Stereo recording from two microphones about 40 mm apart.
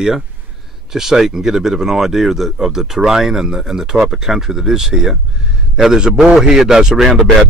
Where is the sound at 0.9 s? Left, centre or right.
Centre.